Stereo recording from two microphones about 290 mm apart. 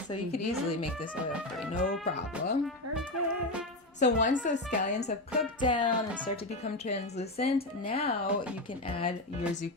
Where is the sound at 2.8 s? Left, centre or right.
Right.